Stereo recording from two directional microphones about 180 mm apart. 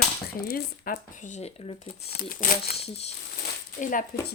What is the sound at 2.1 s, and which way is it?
Speech, 55° left (ahead or behind).